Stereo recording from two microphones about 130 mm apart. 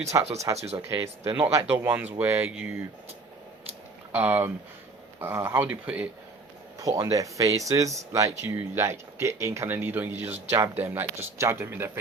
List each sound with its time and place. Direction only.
0.0 s speech: 25° right (ahead or behind)
0.5 s speech: 55° right (ahead or behind)
0.8 s speech: 20° right (ahead or behind)
4.1 s speech: 15° right (ahead or behind)
6.7 s speech: 25° right (ahead or behind)